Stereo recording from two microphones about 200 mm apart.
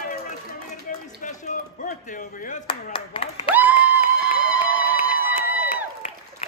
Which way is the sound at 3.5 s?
10° right (ahead or behind).